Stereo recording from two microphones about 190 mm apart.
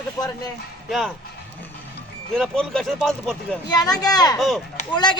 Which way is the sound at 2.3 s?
Centre (ahead or behind).